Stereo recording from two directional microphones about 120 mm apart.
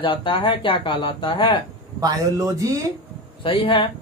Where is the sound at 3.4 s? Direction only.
50° left (ahead or behind).